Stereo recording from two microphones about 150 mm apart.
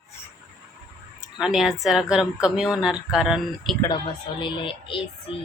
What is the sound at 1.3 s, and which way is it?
A woman's voice, 5° right (ahead or behind).